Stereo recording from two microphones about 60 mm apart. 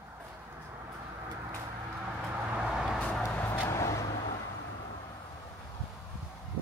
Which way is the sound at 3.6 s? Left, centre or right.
Left.